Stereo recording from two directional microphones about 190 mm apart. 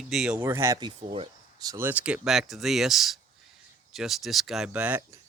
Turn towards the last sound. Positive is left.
turn(degrees=-10)  # may be behind; listen again after turning